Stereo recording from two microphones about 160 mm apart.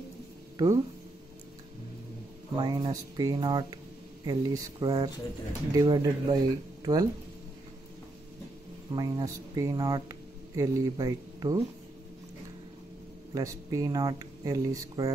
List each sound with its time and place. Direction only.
0.6 s speech: 20° right (ahead or behind)
2.5 s speech: 25° right (ahead or behind)
8.9 s speech: 20° right (ahead or behind)
13.3 s speech: 20° right (ahead or behind)